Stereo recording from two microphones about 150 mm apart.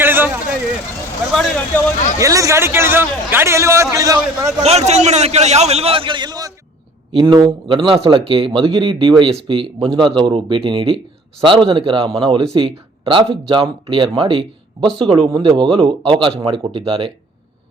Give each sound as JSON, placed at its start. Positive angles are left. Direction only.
{"t": 0.0, "sound": "vehicle", "side_deg": -15}
{"t": 1.3, "sound": "speech", "side_deg": 5}
{"t": 2.1, "sound": "a man's voice", "side_deg": -20}
{"t": 4.6, "sound": "a man's voice", "side_deg": -45}